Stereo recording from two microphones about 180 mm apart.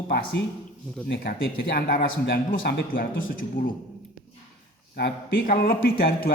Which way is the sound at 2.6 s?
75° left (ahead or behind).